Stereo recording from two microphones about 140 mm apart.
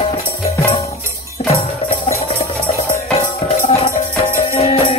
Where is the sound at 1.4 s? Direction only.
50° left (ahead or behind).